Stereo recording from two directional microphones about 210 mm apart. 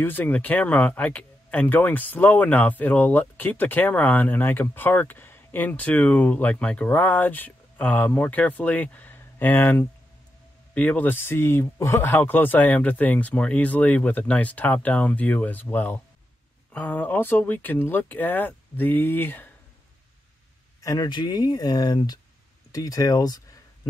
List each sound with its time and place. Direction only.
0.0 s speech: 10° left (ahead or behind)
20.8 s speech: 20° left (ahead or behind)